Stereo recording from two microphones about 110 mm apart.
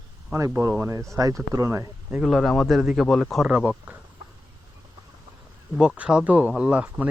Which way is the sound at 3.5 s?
15° right (ahead or behind).